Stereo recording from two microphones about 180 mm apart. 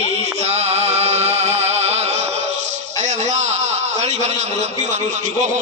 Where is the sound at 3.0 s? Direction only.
40° right (ahead or behind).